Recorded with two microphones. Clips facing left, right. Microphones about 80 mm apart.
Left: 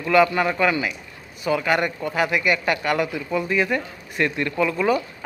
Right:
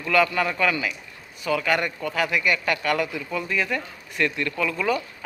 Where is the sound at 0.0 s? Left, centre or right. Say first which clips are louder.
Left 4 dB; centre.